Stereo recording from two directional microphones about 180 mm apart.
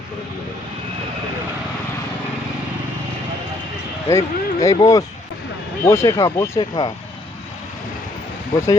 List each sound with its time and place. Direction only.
4.1 s speech: 20° left (ahead or behind)
8.5 s speech: 15° left (ahead or behind)